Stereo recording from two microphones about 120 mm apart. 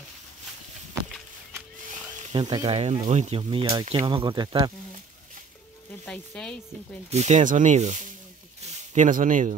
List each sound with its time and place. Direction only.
2.3 s speech: 35° right (ahead or behind)
2.7 s speech: 65° right (ahead or behind)
3.3 s speech: 50° right (ahead or behind)
6.0 s speech: 10° left (ahead or behind)
7.1 s speech: 70° right (ahead or behind)
8.5 s a sound: 80° right